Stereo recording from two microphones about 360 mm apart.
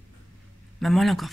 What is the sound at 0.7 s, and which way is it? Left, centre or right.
Speech, centre.